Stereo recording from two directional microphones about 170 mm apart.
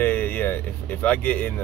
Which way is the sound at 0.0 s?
10° left (ahead or behind).